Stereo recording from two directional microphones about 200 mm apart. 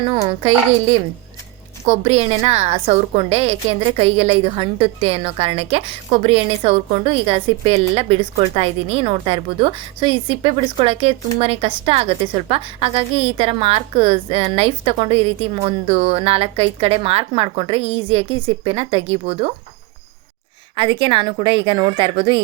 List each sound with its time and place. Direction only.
0.0 s a woman's voice: 25° right (ahead or behind)
1.9 s a woman's voice: 30° right (ahead or behind)
20.7 s a woman's voice: 25° right (ahead or behind)